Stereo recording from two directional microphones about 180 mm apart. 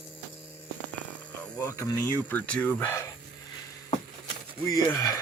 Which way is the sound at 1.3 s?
15° left (ahead or behind).